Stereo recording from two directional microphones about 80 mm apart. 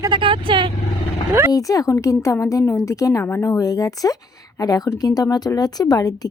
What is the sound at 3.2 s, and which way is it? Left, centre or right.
Speech, left.